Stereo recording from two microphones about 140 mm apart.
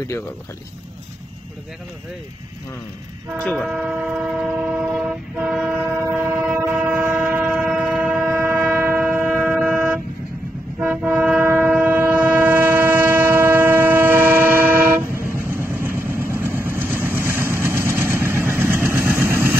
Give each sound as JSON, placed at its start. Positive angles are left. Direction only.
{"t": 3.4, "sound": "speech", "side_deg": 5}
{"t": 3.7, "sound": "train", "side_deg": -5}
{"t": 15.1, "sound": "vehicle", "side_deg": -15}